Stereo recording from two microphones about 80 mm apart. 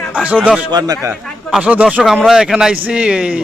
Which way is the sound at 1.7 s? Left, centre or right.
Centre.